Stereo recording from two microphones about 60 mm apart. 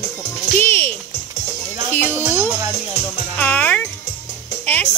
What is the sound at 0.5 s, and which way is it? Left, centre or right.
Music, left.